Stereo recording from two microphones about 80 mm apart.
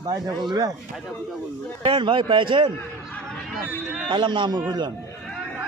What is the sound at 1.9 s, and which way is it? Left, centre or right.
Speech, right.